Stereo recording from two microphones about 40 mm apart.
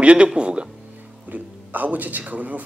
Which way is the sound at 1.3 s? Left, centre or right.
Right.